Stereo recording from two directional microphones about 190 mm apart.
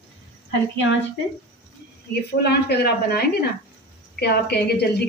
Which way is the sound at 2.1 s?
60° left (ahead or behind).